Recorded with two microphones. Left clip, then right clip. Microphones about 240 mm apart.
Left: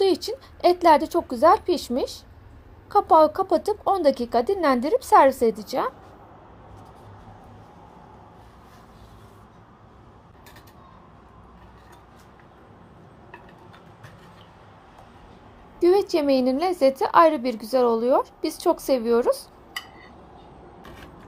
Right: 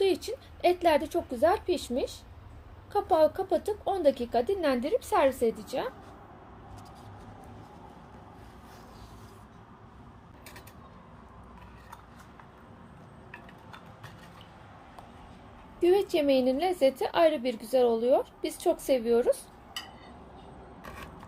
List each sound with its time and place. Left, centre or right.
0.0 s a sound: left
0.6 s a woman's voice: left
15.8 s a woman's voice: left